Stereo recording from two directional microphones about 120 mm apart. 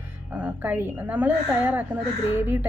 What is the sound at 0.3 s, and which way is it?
A woman's voice, 15° right (ahead or behind).